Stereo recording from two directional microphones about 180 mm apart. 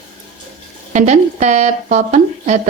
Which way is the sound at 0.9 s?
40° right (ahead or behind).